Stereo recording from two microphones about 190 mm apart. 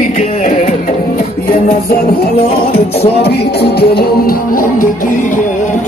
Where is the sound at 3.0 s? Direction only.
60° left (ahead or behind).